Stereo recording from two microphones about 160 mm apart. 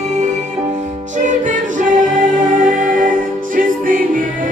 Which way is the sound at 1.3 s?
55° right (ahead or behind).